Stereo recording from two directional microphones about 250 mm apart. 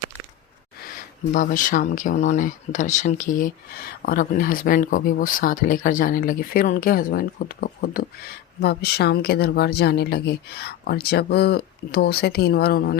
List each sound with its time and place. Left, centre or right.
1.3 s speech: left